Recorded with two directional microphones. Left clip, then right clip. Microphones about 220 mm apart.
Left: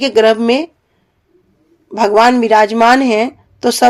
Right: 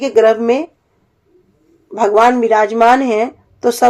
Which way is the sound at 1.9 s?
35° left (ahead or behind).